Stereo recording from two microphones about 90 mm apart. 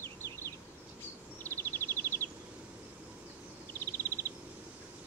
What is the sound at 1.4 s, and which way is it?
Bird vocalization, 25° left (ahead or behind).